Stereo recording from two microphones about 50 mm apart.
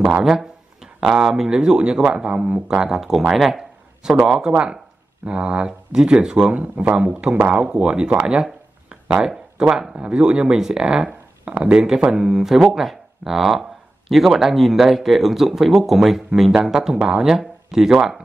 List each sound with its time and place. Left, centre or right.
0.2 s speech: centre; by 2.8 s right
2.8 s speech: centre
3.3 s a sound: centre
4.5 s speech: right
6.5 s speech: right; by 9.4 s centre
9.6 s speech: centre
12.1 s speech: centre